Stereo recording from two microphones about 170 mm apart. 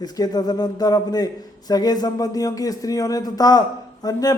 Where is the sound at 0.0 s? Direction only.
25° left (ahead or behind).